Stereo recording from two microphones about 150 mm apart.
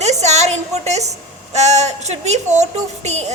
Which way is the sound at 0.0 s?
50° right (ahead or behind).